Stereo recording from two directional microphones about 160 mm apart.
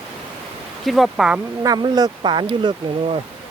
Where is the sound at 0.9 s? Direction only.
Centre (ahead or behind).